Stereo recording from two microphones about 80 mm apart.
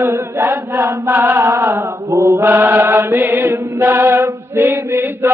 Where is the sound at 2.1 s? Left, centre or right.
Right.